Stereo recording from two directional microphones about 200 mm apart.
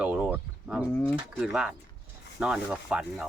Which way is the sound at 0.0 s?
5° right (ahead or behind).